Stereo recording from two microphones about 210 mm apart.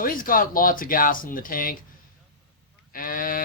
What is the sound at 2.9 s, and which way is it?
Speech, 40° left (ahead or behind).